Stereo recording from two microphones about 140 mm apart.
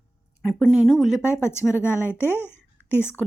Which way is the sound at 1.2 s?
20° left (ahead or behind).